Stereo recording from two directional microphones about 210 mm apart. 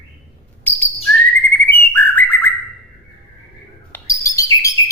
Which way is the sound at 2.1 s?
10° left (ahead or behind).